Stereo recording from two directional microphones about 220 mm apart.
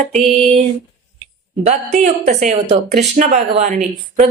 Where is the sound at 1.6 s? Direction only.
30° right (ahead or behind).